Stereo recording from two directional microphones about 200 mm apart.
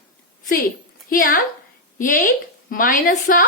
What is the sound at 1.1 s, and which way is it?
A woman's voice, 45° left (ahead or behind).